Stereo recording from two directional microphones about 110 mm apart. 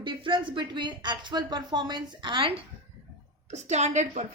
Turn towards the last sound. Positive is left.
turn(degrees=-90)